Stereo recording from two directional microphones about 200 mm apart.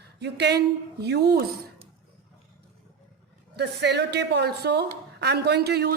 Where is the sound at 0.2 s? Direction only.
55° right (ahead or behind).